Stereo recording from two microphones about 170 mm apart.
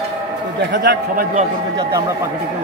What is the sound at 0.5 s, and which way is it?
Speech, 80° right.